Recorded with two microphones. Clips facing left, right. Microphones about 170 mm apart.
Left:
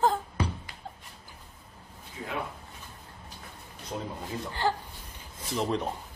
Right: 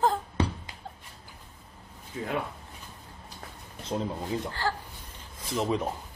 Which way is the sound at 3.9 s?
25° right (ahead or behind).